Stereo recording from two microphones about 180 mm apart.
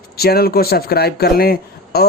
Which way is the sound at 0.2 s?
60° left (ahead or behind).